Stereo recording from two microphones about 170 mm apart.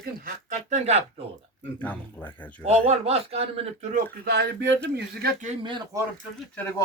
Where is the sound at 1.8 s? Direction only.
10° left (ahead or behind).